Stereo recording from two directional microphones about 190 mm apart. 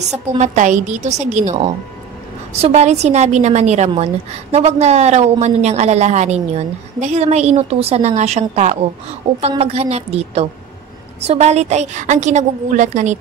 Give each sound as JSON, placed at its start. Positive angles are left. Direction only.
{"t": 0.1, "sound": "a woman's voice", "side_deg": -40}
{"t": 2.6, "sound": "a woman's voice", "side_deg": -35}